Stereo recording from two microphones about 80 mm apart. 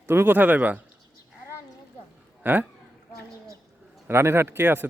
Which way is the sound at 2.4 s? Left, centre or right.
Right.